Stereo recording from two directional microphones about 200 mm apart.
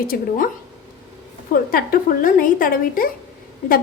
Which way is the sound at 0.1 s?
45° left (ahead or behind).